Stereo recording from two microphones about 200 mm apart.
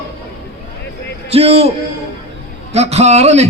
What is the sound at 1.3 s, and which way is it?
Speech, 30° right (ahead or behind).